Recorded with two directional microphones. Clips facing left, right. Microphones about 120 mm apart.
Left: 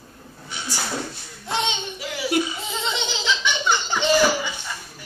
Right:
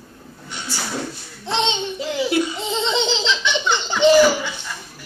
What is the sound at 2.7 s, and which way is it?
Laughter, 25° right (ahead or behind).